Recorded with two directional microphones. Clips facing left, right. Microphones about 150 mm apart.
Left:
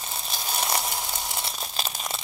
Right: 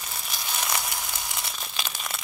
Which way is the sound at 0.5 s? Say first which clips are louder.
Left 3 dB; 35° left (ahead or behind).